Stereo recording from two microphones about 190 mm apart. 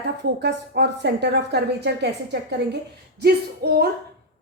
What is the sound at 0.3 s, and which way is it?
A woman's voice, 60° right (ahead or behind).